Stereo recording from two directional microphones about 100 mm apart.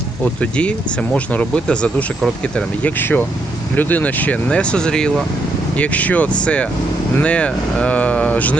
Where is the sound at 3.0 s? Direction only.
20° left (ahead or behind).